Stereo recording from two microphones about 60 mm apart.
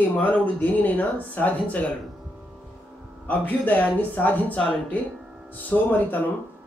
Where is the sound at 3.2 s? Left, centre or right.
Left.